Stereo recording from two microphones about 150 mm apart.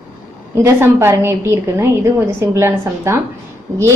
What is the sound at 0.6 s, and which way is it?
A woman's voice, 15° right (ahead or behind).